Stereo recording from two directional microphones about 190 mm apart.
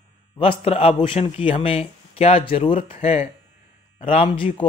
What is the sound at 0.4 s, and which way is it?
A man's voice, 30° left (ahead or behind).